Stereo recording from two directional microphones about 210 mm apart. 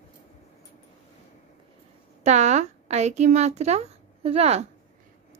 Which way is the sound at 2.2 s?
35° right (ahead or behind).